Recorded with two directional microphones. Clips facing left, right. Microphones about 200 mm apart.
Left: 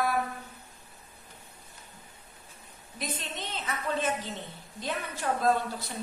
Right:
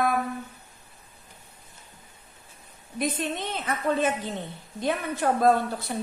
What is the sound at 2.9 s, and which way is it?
A woman's voice, 55° right (ahead or behind).